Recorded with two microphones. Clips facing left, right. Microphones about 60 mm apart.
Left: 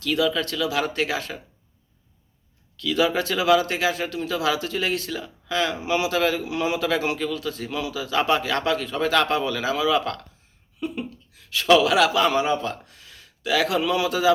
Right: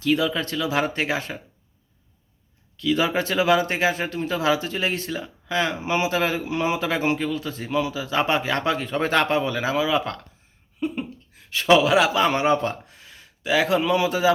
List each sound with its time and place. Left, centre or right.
0.0 s speech: right
2.7 s speech: right
12.3 s speech: right
12.6 s speech: right